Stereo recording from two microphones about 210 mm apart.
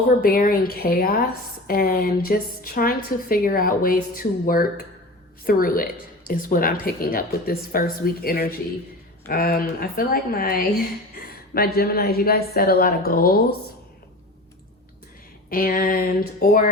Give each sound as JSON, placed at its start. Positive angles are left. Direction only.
{"t": 0.2, "sound": "a woman's voice", "side_deg": 45}
{"t": 15.4, "sound": "a woman's voice", "side_deg": 45}